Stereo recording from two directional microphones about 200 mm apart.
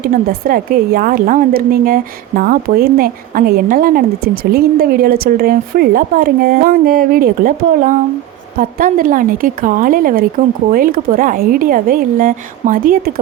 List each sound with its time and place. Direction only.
0.0 s a woman's voice: 45° right (ahead or behind)